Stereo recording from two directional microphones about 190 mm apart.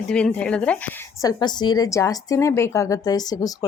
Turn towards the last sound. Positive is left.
turn(degrees=20)  # may be behind; listen again after turning